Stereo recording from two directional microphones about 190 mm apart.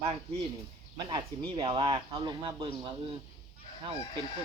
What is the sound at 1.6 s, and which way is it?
Speech, 25° right (ahead or behind).